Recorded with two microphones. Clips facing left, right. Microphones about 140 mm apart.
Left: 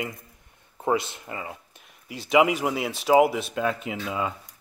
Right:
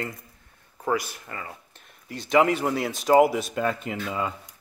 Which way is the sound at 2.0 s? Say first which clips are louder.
Even; 5° left (ahead or behind).